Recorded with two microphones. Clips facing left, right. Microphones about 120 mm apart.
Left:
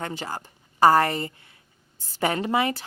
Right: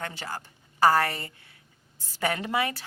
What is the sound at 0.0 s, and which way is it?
A woman's voice, 20° left (ahead or behind).